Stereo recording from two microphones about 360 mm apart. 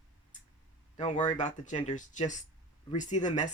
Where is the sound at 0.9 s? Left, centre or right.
Centre.